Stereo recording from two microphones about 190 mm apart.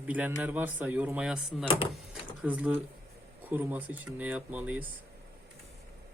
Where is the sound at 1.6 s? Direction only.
30° left (ahead or behind).